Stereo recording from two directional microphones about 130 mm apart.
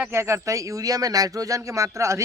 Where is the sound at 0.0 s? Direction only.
20° right (ahead or behind).